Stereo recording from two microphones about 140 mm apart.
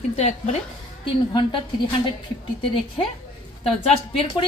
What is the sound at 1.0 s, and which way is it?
Speech, 35° left (ahead or behind).